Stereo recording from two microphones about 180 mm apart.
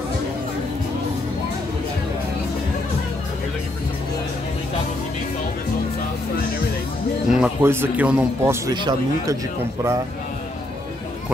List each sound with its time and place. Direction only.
7.2 s music: 5° right (ahead or behind)
7.6 s speech: 10° right (ahead or behind)
8.6 s speech: 20° right (ahead or behind)